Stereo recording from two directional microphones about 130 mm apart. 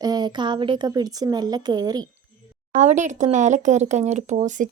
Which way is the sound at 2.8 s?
70° right (ahead or behind).